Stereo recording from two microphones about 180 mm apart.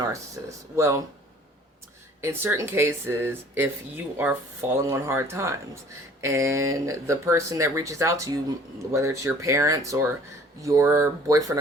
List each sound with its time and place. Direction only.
0.0 s speech: 15° right (ahead or behind)
2.2 s speech: 10° right (ahead or behind)